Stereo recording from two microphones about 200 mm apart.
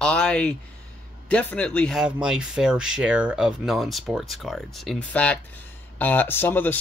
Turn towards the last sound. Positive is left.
turn(degrees=10)  # may be behind; listen again after turning